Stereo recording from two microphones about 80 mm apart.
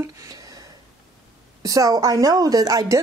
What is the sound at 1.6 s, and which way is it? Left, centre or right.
A woman's voice, right.